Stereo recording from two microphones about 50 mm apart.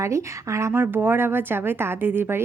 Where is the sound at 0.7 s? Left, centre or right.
Right.